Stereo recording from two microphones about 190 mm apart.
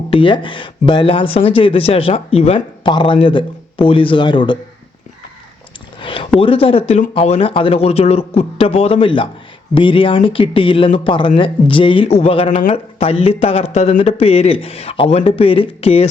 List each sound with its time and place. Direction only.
0.1 s speech: 25° left (ahead or behind)
6.0 s speech: 25° left (ahead or behind)